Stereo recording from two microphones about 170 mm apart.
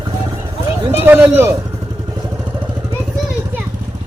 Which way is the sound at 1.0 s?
10° right (ahead or behind).